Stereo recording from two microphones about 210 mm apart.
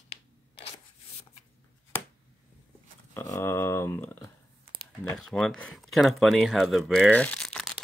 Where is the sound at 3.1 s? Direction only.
10° left (ahead or behind).